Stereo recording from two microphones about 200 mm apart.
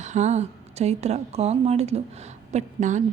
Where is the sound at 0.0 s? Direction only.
35° right (ahead or behind).